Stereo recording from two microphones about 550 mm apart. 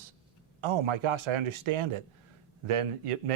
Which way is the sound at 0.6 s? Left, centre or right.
Right.